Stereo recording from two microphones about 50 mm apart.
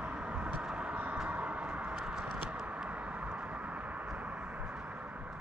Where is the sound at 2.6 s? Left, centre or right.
Right.